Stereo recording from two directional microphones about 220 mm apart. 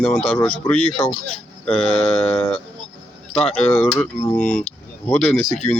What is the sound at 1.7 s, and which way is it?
Mantra, 25° left (ahead or behind).